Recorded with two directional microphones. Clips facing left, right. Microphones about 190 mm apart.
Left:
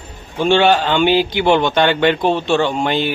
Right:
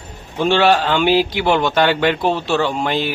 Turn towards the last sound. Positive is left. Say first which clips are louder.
# left 2 dB
turn(degrees=0)  # may be behind; listen again after turning